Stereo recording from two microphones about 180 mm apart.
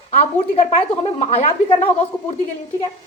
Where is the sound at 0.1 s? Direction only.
35° left (ahead or behind).